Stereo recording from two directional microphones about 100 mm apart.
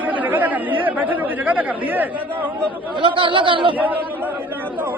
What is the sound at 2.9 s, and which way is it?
Speech, 55° right (ahead or behind).